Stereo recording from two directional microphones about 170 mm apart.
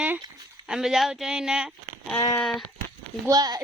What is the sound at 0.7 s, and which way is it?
Speech, centre (ahead or behind).